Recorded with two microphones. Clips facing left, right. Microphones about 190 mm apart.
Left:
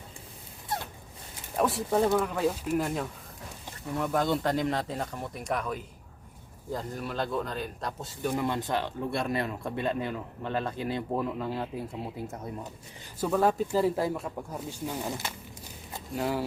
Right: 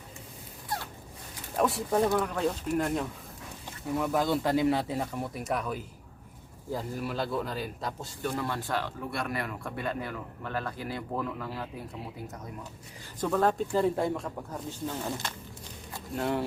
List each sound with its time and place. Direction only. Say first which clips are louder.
1.5 s speech: even; centre (ahead or behind)
8.2 s a man's voice: left 3 dB; 15° left (ahead or behind)
13.1 s speech: left 1 dB; 5° left (ahead or behind)